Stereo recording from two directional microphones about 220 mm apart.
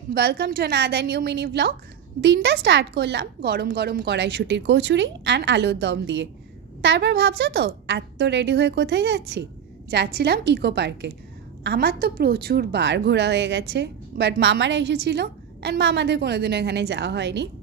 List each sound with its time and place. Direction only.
0.1 s a woman's voice: 45° right (ahead or behind)